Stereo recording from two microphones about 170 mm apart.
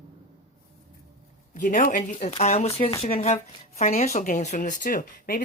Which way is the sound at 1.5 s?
50° left (ahead or behind).